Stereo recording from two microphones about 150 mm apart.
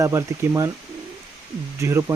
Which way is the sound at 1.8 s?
20° right (ahead or behind).